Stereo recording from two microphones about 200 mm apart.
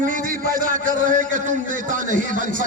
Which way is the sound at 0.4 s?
45° right (ahead or behind).